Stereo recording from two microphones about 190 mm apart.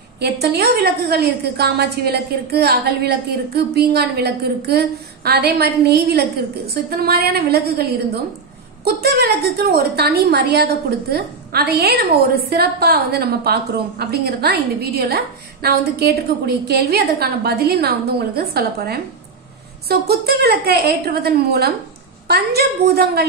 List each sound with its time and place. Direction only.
0.2 s a woman's voice: 55° right (ahead or behind)